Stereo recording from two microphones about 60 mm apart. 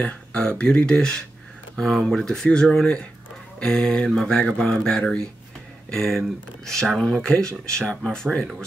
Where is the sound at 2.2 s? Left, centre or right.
Centre.